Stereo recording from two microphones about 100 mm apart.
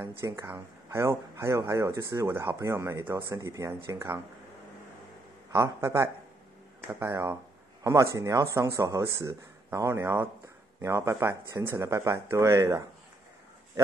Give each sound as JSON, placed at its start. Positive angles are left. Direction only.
{"t": 0.0, "sound": "speech", "side_deg": -25}
{"t": 5.5, "sound": "speech", "side_deg": -30}
{"t": 7.1, "sound": "speech", "side_deg": -30}